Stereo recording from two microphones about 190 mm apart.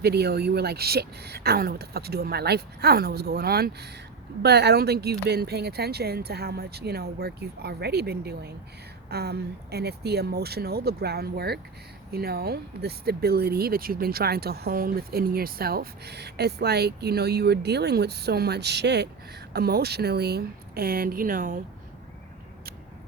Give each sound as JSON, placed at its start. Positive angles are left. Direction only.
{"t": 0.0, "sound": "speech", "side_deg": -60}